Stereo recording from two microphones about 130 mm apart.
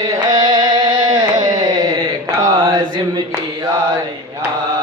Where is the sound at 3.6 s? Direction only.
30° right (ahead or behind).